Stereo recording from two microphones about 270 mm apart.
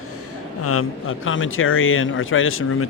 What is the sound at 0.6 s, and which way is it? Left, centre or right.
Speech, left.